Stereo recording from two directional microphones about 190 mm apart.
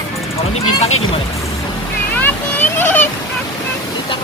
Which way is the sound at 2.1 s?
10° left (ahead or behind).